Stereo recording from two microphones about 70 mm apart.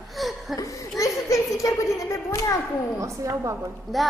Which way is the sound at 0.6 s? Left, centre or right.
Left.